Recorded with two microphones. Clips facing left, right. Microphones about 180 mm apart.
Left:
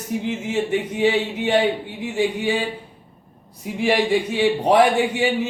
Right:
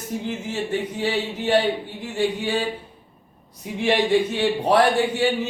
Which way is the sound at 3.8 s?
10° left (ahead or behind).